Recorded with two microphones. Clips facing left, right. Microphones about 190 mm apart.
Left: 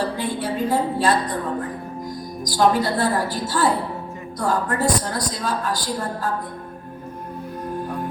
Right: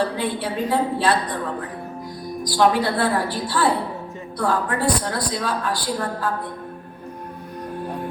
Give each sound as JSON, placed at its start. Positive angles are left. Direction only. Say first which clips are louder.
{"t": 0.2, "sound": "a woman's voice", "louder": "even", "side_deg": 45}
{"t": 2.4, "sound": "a woman's voice", "louder": "even", "side_deg": 45}